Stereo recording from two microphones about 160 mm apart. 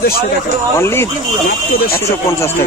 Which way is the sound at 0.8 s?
15° left (ahead or behind).